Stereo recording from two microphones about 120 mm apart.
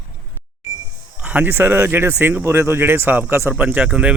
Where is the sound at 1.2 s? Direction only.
15° right (ahead or behind).